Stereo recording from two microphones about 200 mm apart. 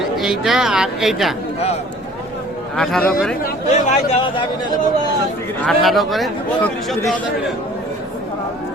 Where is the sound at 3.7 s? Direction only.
35° left (ahead or behind).